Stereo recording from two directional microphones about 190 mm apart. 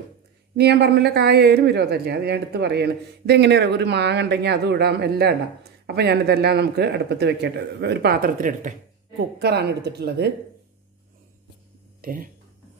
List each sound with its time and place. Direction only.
0.6 s speech: 60° right (ahead or behind); by 8.7 s 45° right (ahead or behind)
9.4 s speech: 60° right (ahead or behind)
12.0 s speech: 50° right (ahead or behind)